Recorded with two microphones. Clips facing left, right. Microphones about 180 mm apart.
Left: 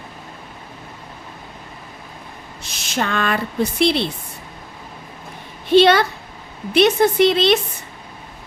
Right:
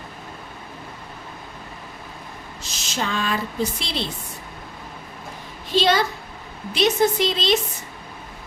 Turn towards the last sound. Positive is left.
turn(degrees=60)  # may be behind; listen again after turning